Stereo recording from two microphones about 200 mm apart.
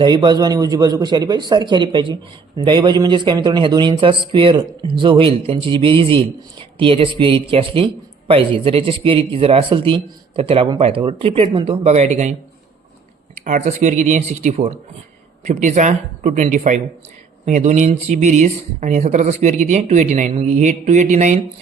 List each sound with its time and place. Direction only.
0.0 s a man's voice: 20° right (ahead or behind)
13.3 s speech: 35° right (ahead or behind)